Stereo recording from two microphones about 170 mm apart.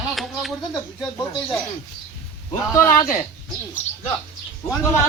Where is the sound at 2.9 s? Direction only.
55° left (ahead or behind).